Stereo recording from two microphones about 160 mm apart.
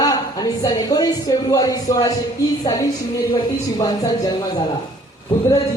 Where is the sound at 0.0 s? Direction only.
25° left (ahead or behind).